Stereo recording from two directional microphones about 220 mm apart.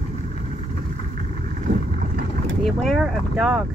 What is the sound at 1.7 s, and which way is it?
Boat, 55° right (ahead or behind).